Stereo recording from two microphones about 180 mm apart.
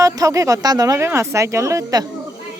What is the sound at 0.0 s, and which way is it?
Speech, 20° right (ahead or behind).